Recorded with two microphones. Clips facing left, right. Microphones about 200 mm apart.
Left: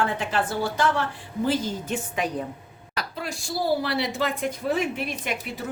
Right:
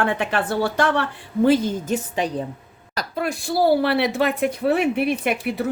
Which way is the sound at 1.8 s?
40° right (ahead or behind).